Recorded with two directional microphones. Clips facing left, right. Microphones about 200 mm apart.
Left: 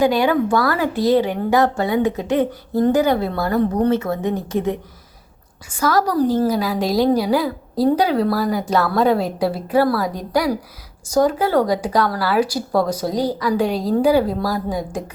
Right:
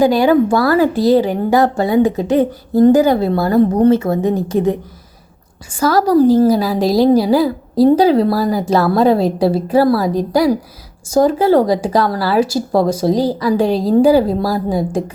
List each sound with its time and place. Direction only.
0.0 s a woman's voice: 35° right (ahead or behind)